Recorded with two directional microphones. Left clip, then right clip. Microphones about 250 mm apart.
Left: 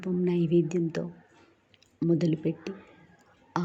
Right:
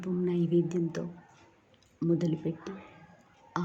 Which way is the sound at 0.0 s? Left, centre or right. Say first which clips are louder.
Left 3 dB; centre.